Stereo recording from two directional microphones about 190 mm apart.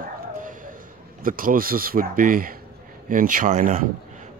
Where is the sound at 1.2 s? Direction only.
45° right (ahead or behind).